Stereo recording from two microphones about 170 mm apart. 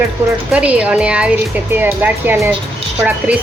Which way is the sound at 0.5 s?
5° right (ahead or behind).